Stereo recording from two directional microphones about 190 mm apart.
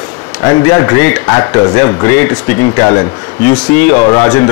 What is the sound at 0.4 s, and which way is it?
Speech, 15° left (ahead or behind).